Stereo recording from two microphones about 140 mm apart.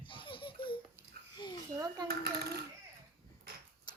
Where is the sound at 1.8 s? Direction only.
25° right (ahead or behind).